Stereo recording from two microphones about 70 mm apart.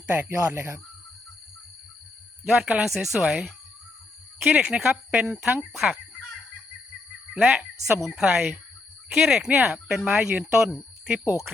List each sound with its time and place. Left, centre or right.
0.1 s speech: right
2.5 s speech: centre
4.4 s speech: centre
5.7 s fowl: centre
7.3 s speech: centre